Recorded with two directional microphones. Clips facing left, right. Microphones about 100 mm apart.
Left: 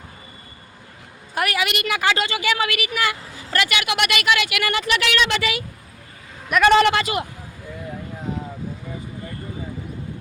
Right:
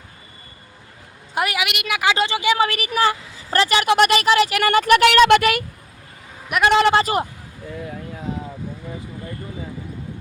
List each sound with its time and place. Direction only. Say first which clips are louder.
1.4 s a woman's voice: right 1 dB; 20° right (ahead or behind)
1.6 s a woman's voice: even; 5° right (ahead or behind)
2.1 s speech: right 4 dB; 25° right (ahead or behind)
2.6 s speech: right 4 dB; 35° right (ahead or behind); by 5.6 s 55° right (ahead or behind)
6.5 s speech: left 1 dB; 20° right (ahead or behind)
6.9 s speech: right 5 dB; 35° right (ahead or behind)